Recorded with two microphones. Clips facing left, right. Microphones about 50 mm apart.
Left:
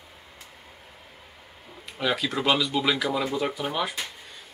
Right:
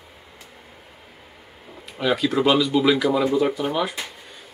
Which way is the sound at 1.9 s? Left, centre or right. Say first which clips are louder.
Right 6 dB; centre.